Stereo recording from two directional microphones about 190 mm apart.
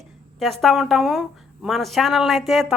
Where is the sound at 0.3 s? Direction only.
Centre (ahead or behind).